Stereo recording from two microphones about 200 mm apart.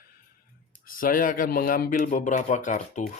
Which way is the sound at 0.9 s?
45° left (ahead or behind).